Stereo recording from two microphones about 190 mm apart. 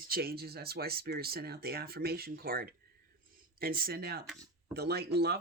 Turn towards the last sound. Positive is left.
turn(degrees=-60)  # may be behind; listen again after turning